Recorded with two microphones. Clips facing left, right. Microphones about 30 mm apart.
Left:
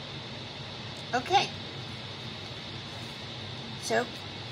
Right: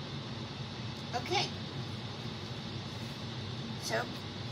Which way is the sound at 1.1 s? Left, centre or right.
Left.